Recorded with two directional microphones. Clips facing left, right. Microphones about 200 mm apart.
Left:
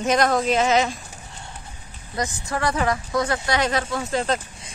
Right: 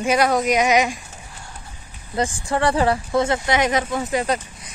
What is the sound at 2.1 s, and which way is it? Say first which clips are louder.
Speech: right 5 dB; 30° right (ahead or behind).